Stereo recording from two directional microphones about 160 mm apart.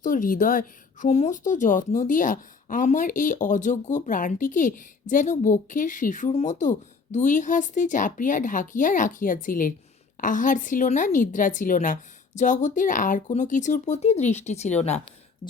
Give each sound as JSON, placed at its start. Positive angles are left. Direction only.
{"t": 0.0, "sound": "speech", "side_deg": 55}